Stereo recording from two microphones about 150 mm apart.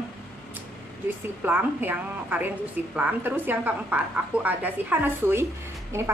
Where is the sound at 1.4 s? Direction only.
10° right (ahead or behind).